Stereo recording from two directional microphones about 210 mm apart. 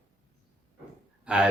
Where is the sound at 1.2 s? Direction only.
5° right (ahead or behind).